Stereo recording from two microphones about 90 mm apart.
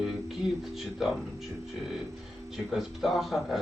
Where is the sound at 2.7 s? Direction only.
5° right (ahead or behind).